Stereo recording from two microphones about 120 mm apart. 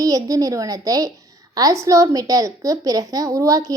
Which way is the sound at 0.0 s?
30° right (ahead or behind).